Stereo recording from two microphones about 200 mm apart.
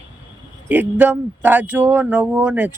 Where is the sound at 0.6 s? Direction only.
10° right (ahead or behind).